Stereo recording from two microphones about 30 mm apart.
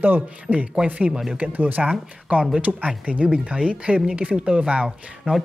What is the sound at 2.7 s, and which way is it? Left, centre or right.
Speech, centre.